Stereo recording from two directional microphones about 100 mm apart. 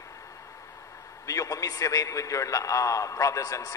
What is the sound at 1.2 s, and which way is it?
A man's voice, 35° left (ahead or behind).